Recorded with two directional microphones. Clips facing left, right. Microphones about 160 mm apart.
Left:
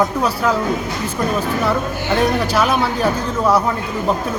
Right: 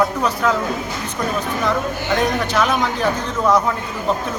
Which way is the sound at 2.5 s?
10° left (ahead or behind).